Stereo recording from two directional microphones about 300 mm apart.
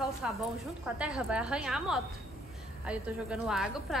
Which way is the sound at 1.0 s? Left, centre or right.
Centre.